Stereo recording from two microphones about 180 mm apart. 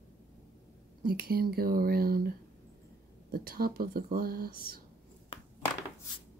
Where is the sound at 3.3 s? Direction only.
55° right (ahead or behind).